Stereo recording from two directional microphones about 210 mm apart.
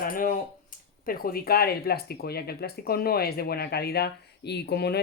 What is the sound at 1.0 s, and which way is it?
Speech, 45° left (ahead or behind).